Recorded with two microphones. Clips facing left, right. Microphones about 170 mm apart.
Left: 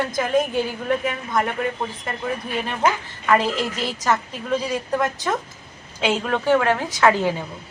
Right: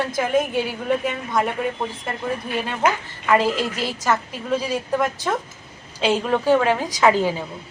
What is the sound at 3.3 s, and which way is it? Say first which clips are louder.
A woman's voice: right 1 dB; 10° right (ahead or behind).